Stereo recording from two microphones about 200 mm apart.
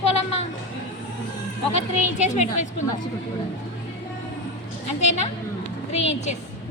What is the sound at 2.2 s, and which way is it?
Speech, 35° left (ahead or behind).